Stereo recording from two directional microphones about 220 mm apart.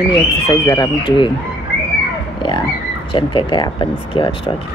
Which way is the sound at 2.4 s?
20° left (ahead or behind).